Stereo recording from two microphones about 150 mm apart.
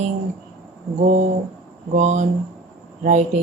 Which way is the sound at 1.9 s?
50° right (ahead or behind).